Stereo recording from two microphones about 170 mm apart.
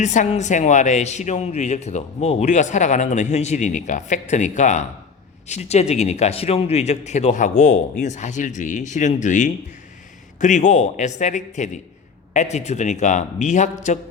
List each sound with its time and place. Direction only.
0.0 s a man's voice: 45° left (ahead or behind)